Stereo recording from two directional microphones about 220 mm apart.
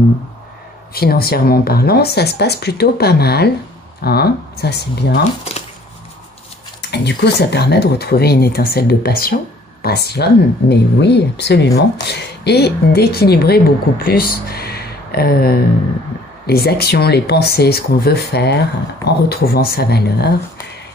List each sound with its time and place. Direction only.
0.9 s speech: 45° left (ahead or behind)
6.8 s speech: 50° left (ahead or behind)